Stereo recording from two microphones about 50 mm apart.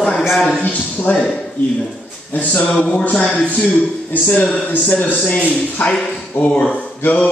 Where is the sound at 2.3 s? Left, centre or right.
Left.